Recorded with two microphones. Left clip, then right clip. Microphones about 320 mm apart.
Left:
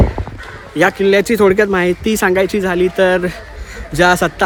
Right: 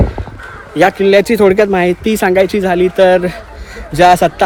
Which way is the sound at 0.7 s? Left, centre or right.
Centre.